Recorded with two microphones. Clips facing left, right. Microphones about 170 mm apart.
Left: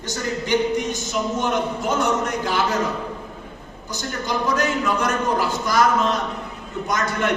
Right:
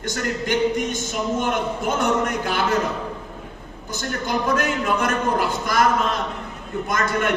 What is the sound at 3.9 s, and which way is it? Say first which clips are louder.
A man's voice: right 1 dB; 55° right (ahead or behind).